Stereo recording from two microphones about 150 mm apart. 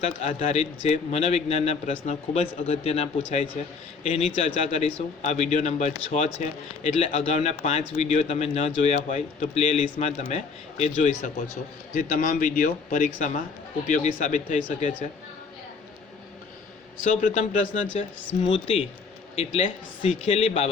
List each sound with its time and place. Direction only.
0.0 s a man's voice: 50° left (ahead or behind)
11.9 s a man's voice: 70° left (ahead or behind); by 14.9 s 50° left (ahead or behind)
17.0 s a man's voice: 60° left (ahead or behind)
18.4 s a man's voice: 40° left (ahead or behind)